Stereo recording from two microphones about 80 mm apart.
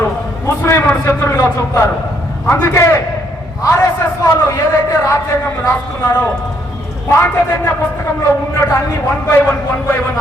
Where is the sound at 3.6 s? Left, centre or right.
Left.